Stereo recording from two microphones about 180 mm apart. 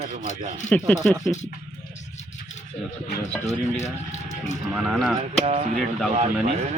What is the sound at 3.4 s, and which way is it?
Speech, 40° left (ahead or behind).